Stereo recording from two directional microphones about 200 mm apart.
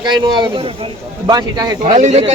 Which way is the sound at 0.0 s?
20° right (ahead or behind).